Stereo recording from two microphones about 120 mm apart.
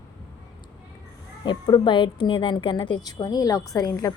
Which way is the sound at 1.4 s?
40° left (ahead or behind).